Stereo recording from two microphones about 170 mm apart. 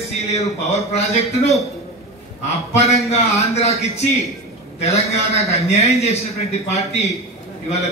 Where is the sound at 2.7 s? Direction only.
40° left (ahead or behind).